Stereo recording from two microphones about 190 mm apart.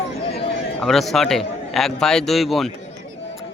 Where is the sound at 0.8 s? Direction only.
Centre (ahead or behind).